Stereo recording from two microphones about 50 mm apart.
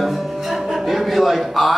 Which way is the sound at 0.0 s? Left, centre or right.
Centre.